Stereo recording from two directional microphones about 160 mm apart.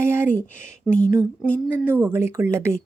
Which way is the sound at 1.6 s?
15° right (ahead or behind).